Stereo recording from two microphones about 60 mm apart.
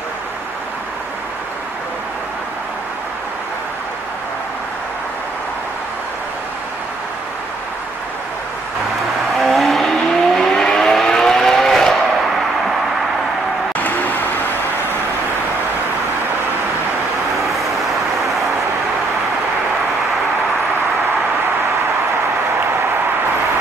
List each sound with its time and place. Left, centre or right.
9.4 s vehicle: centre
13.7 s applause: left